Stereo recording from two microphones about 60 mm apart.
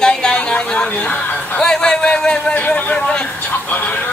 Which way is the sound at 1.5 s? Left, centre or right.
Centre.